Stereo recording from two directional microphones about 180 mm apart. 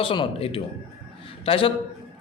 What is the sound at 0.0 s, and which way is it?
A man's voice, 30° left (ahead or behind).